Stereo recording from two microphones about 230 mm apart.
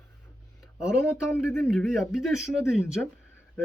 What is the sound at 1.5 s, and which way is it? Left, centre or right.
Speech, centre.